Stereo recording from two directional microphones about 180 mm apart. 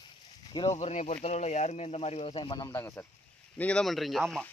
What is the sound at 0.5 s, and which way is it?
Speech, 35° left (ahead or behind).